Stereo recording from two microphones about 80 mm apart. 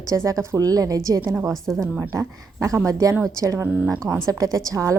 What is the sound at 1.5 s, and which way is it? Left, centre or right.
Speech, centre.